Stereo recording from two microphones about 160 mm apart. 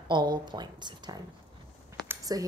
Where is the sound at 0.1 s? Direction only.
30° right (ahead or behind).